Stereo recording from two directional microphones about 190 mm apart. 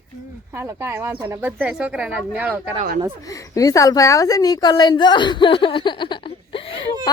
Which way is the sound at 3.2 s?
15° left (ahead or behind).